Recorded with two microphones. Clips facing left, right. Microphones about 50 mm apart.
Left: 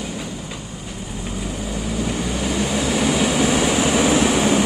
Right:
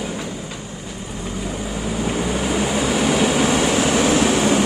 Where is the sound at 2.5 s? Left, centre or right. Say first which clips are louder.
Right 1 dB; centre.